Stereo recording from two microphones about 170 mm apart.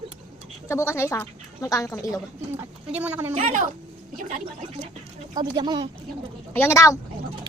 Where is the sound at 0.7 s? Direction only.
15° left (ahead or behind).